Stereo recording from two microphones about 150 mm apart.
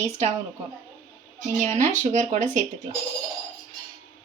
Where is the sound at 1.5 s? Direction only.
55° right (ahead or behind).